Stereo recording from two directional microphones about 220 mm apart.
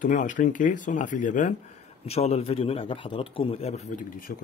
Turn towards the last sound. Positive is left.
turn(degrees=45)  # may be behind; listen again after turning